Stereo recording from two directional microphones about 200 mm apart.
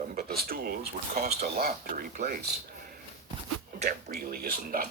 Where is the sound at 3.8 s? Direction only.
45° right (ahead or behind).